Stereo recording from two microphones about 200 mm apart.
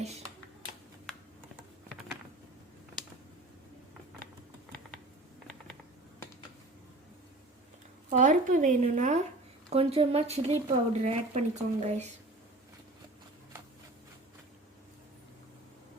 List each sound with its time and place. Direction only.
8.1 s speech: 40° right (ahead or behind)